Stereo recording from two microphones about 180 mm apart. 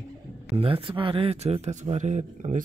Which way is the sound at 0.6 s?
30° right (ahead or behind).